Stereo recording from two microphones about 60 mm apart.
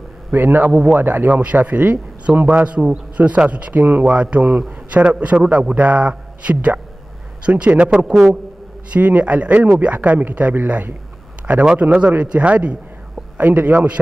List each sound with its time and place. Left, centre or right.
0.3 s a man's voice: right
0.7 s a man's voice: right